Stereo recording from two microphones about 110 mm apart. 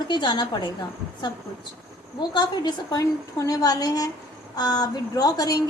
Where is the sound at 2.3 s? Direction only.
40° left (ahead or behind).